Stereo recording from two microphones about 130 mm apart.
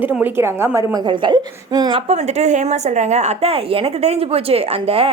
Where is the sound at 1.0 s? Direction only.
35° right (ahead or behind).